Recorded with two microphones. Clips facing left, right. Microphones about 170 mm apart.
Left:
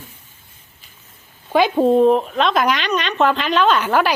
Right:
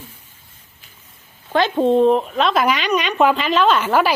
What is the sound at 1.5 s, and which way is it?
Speech, 10° left (ahead or behind).